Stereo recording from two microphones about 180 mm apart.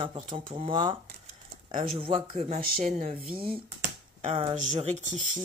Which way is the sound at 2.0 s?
30° right (ahead or behind).